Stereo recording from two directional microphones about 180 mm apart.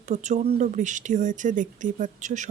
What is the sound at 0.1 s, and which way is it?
Speech, 40° right (ahead or behind).